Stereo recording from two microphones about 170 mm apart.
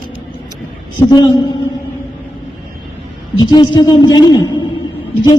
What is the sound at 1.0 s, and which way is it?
Speech, 25° left (ahead or behind).